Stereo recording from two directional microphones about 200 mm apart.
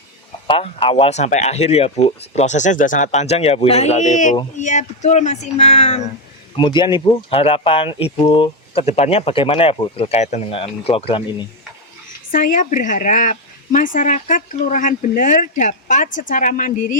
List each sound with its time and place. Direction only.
0.4 s speech: 25° left (ahead or behind)
6.6 s speech: 20° left (ahead or behind)
12.3 s speech: 40° left (ahead or behind)